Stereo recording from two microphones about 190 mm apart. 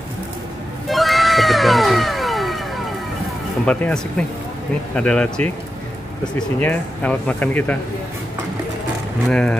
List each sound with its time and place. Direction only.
0.8 s cat: centre (ahead or behind)
3.6 s speech: 5° left (ahead or behind)
9.3 s speech: 5° left (ahead or behind)